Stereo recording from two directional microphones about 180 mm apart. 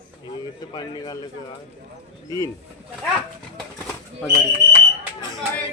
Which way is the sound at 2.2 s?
15° left (ahead or behind).